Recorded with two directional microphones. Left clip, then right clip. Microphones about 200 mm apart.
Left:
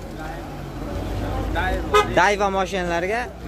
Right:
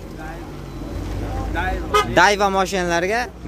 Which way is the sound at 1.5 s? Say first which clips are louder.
Even; 5° right (ahead or behind).